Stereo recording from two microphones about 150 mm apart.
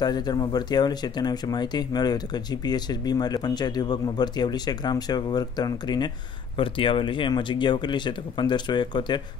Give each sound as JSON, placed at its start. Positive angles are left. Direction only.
{"t": 0.0, "sound": "speech", "side_deg": 25}